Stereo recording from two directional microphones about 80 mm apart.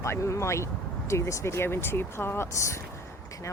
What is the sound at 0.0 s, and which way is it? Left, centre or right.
Speech, left.